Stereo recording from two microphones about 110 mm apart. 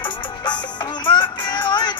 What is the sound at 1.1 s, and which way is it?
Music, 45° left (ahead or behind).